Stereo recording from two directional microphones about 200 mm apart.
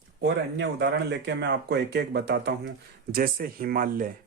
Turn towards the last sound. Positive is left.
turn(degrees=-45)  # may be behind; listen again after turning